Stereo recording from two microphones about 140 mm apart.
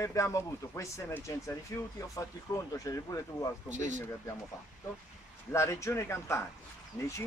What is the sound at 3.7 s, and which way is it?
Speech, 60° right (ahead or behind).